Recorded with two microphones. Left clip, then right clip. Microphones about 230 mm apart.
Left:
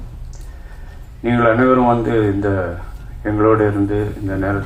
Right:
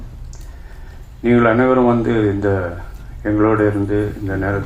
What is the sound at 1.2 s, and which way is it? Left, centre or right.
A man's voice, right.